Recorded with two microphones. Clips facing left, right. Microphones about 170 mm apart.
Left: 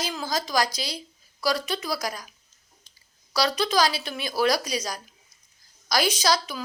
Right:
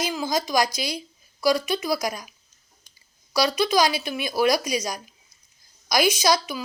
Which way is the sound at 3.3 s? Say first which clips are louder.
Right 3 dB; 10° right (ahead or behind).